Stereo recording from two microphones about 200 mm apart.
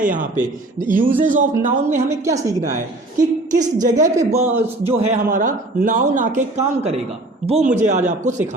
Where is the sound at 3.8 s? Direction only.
40° right (ahead or behind).